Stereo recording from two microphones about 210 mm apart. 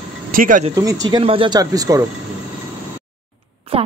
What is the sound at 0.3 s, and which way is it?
Speech, 40° right (ahead or behind).